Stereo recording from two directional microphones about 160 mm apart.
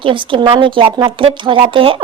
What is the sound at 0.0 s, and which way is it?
A woman's voice, 30° right (ahead or behind).